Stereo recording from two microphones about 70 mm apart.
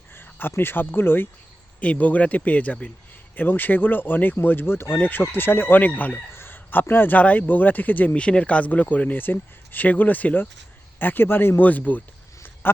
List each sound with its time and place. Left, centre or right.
0.2 s a man's voice: left